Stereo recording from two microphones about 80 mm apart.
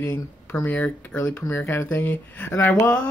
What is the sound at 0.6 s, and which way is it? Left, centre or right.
Speech, centre.